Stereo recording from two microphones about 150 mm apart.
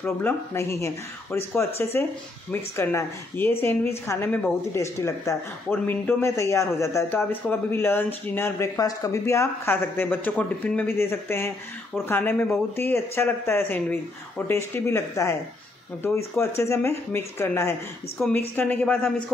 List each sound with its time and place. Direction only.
0.0 s a woman's voice: 15° left (ahead or behind)
16.3 s a woman's voice: 20° left (ahead or behind)